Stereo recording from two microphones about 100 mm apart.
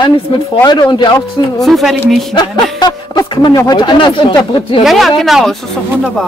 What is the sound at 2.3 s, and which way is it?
Speech, 45° left (ahead or behind).